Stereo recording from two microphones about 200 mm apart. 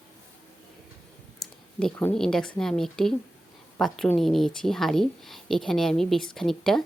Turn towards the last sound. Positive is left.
turn(degrees=0)  # may be behind; listen again after turning